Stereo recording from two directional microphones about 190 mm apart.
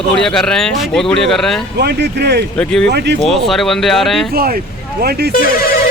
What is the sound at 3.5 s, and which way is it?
Speech, centre (ahead or behind).